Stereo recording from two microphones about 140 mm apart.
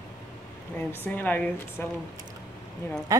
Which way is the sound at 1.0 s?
10° left (ahead or behind).